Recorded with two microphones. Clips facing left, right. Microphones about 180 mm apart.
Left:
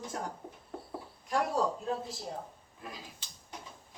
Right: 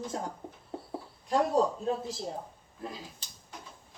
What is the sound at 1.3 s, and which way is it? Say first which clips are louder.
Speech: right 5 dB; 20° right (ahead or behind).